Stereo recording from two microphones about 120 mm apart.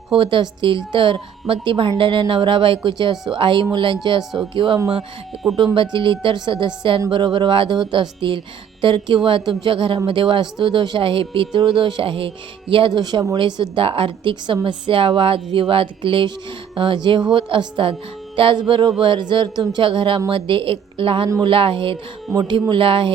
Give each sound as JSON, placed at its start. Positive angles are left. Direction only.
{"t": 0.1, "sound": "speech", "side_deg": -45}
{"t": 4.2, "sound": "speech", "side_deg": -5}
{"t": 4.5, "sound": "speech", "side_deg": -45}
{"t": 22.3, "sound": "speech", "side_deg": -25}
{"t": 22.7, "sound": "speech", "side_deg": -45}